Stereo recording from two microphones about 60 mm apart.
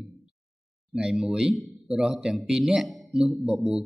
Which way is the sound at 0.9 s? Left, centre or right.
Centre.